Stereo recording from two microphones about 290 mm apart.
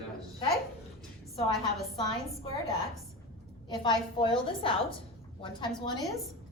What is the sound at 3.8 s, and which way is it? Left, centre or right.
A woman's voice, centre.